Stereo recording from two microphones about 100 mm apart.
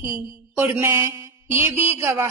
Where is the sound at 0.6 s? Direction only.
20° right (ahead or behind).